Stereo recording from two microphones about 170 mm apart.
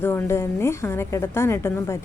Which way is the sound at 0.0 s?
15° left (ahead or behind).